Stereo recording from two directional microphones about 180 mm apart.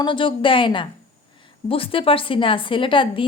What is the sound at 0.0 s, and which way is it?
A woman's voice, 25° left (ahead or behind).